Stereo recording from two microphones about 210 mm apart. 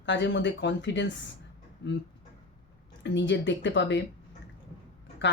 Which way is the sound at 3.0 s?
60° left (ahead or behind).